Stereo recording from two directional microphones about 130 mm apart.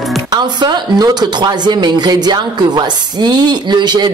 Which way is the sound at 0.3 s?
35° right (ahead or behind).